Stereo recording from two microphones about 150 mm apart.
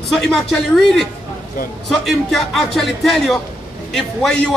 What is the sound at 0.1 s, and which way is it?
A man's voice, 5° left (ahead or behind).